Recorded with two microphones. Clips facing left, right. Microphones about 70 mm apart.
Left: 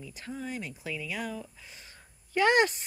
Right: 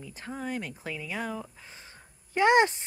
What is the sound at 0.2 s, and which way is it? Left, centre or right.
Speech, right.